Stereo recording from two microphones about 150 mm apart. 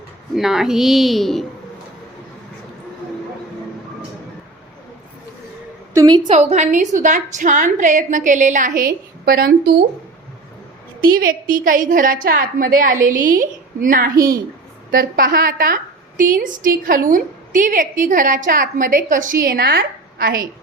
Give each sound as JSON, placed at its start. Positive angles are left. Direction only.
{"t": 0.3, "sound": "a woman's voice", "side_deg": -5}
{"t": 5.9, "sound": "a woman's voice", "side_deg": -20}
{"t": 6.2, "sound": "a woman's voice", "side_deg": -45}
{"t": 11.2, "sound": "a woman's voice", "side_deg": -65}